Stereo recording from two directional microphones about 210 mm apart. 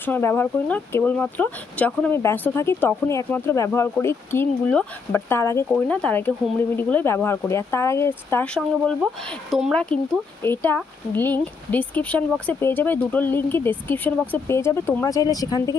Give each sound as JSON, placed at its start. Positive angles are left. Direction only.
{"t": 0.0, "sound": "speech", "side_deg": 10}